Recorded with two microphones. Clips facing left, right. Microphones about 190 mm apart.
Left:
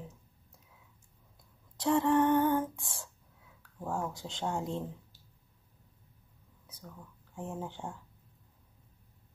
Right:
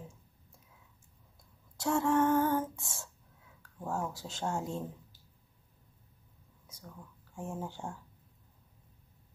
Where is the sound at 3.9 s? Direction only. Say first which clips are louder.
Even; 5° right (ahead or behind).